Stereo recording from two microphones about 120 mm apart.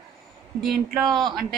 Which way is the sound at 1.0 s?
35° right (ahead or behind).